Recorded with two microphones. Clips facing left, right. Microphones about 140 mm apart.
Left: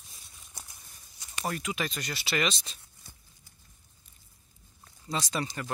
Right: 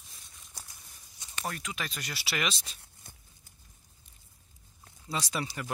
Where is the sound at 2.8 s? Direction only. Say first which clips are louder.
Right 1 dB; 55° right (ahead or behind).